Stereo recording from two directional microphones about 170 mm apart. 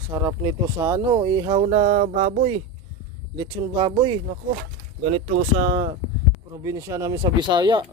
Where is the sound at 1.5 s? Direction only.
40° right (ahead or behind).